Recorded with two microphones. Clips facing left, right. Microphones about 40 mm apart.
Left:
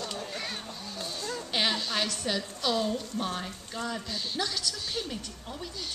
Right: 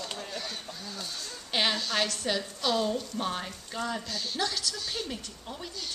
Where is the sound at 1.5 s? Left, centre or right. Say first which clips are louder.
Right 1 dB; centre.